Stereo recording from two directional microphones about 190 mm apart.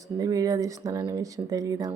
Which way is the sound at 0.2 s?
20° right (ahead or behind).